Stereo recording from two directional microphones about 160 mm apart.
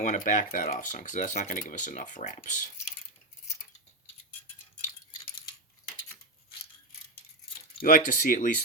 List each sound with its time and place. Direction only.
0.0 s speech: 55° left (ahead or behind)
7.8 s speech: 55° left (ahead or behind)